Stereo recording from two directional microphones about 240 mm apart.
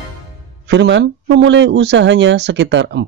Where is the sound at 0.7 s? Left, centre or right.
Right.